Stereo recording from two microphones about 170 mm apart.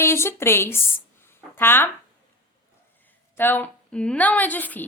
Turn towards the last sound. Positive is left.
turn(degrees=10)  # may be behind; listen again after turning